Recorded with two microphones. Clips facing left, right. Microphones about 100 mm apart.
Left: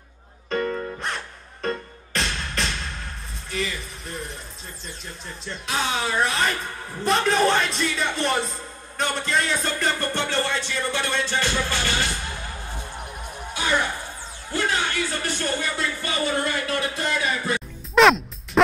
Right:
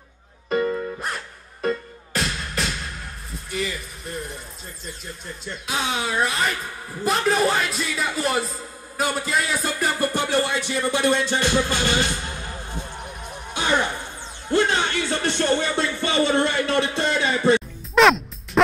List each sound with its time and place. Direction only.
0.5 s music: 10° right (ahead or behind)
4.8 s speech: centre (ahead or behind); by 12.1 s 20° right (ahead or behind)
13.5 s music: 25° right (ahead or behind)
15.5 s speech: 25° right (ahead or behind)
17.9 s music: centre (ahead or behind)